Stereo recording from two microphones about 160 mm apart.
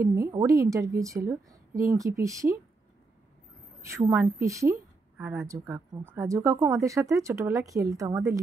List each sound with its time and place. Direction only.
0.0 s a woman's voice: 20° right (ahead or behind)
4.1 s a woman's voice: 20° right (ahead or behind)